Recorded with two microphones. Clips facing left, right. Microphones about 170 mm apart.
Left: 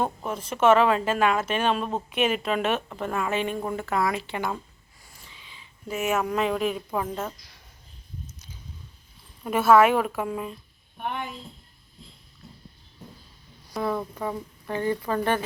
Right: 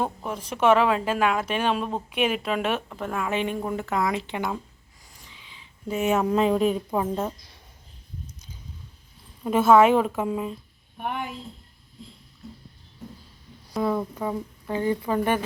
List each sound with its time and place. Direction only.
0.3 s speech: 10° right (ahead or behind)
5.2 s a sound: 15° right (ahead or behind)
5.9 s speech: 30° right (ahead or behind)
7.2 s a woman's voice: 15° right (ahead or behind)
9.7 s speech: 25° right (ahead or behind)
11.0 s a woman's voice: 5° right (ahead or behind)
13.8 s speech: 15° right (ahead or behind)